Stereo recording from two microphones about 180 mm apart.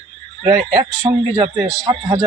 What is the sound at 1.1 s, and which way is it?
Speech, 20° right (ahead or behind).